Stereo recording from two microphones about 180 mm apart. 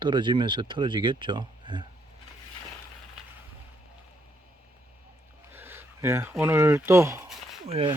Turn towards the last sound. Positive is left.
turn(degrees=-30)  # may be behind; listen again after turning